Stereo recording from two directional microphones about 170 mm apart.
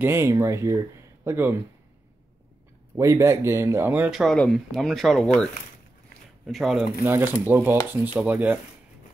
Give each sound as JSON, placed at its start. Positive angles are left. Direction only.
{"t": 0.0, "sound": "speech", "side_deg": -15}
{"t": 3.0, "sound": "speech", "side_deg": -15}
{"t": 7.0, "sound": "speech", "side_deg": -15}